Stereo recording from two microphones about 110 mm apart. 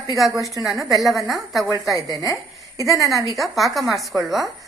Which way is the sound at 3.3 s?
Centre (ahead or behind).